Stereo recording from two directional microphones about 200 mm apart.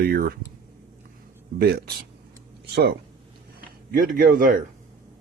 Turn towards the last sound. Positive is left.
turn(degrees=-45)  # may be behind; listen again after turning